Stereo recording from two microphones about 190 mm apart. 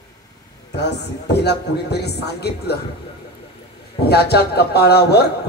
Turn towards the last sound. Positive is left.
turn(degrees=60)  # may be behind; listen again after turning